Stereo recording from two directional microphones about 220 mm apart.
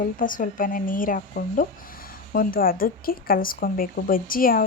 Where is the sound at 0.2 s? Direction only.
40° left (ahead or behind).